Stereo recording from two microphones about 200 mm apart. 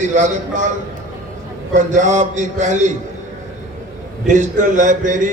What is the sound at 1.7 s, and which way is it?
A man's voice, 40° right (ahead or behind).